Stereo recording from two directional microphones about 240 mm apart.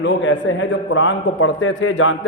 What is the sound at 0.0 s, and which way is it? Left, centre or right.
A man's voice, left.